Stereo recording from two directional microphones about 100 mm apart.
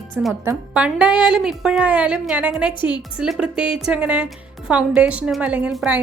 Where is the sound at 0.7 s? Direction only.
10° right (ahead or behind).